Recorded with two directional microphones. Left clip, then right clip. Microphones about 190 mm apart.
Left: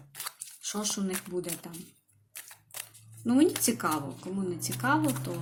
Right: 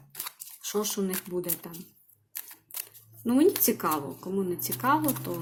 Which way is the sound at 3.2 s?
10° right (ahead or behind).